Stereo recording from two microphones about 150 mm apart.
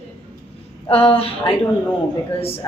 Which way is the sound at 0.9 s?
40° left (ahead or behind).